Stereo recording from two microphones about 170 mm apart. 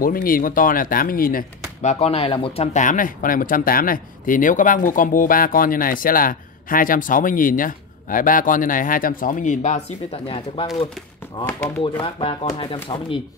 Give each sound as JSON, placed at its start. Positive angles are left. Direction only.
{"t": 0.0, "sound": "speech", "side_deg": 55}
{"t": 1.8, "sound": "speech", "side_deg": 40}